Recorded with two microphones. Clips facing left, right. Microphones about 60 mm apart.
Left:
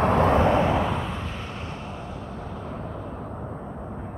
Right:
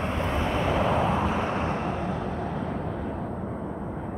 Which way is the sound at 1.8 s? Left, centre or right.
Right.